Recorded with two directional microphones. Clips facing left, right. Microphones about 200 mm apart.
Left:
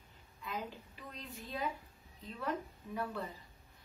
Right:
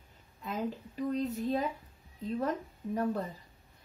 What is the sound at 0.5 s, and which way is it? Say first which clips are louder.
Speech: right 8 dB; 45° right (ahead or behind).